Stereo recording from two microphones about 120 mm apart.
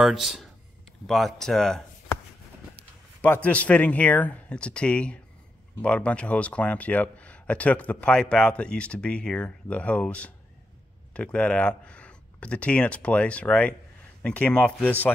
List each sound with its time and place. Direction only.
0.0 s speech: centre (ahead or behind)
3.2 s speech: 15° left (ahead or behind)